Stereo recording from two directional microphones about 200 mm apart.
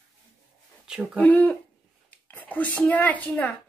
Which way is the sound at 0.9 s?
5° left (ahead or behind).